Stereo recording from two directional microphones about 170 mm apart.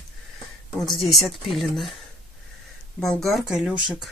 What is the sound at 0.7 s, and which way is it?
Speech, centre (ahead or behind).